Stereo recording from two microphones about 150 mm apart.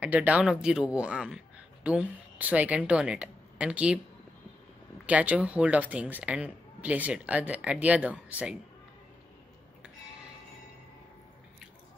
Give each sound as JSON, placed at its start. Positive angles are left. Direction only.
{"t": 0.0, "sound": "a man's voice", "side_deg": -10}
{"t": 5.0, "sound": "speech", "side_deg": -10}